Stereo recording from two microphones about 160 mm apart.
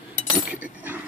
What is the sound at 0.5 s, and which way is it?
Chink, 10° right (ahead or behind).